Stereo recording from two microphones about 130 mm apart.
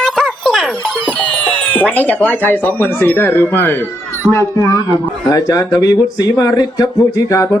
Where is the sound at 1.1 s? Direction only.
10° left (ahead or behind).